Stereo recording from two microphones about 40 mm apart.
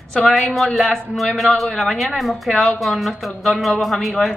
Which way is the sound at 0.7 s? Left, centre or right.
Centre.